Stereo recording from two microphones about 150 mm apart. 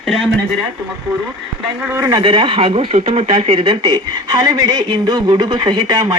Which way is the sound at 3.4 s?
35° right (ahead or behind).